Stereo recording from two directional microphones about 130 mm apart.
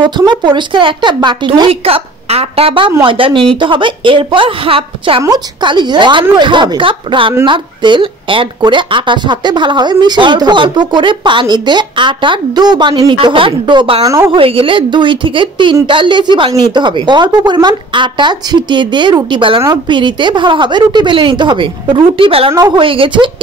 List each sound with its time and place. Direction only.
0.0 s speech: 35° right (ahead or behind)
5.2 s speech: 35° right (ahead or behind)
14.0 s a woman's voice: 25° right (ahead or behind)
14.3 s speech: 45° right (ahead or behind)